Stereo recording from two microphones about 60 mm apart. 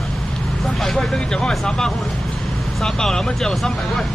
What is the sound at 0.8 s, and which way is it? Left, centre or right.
Speech, centre.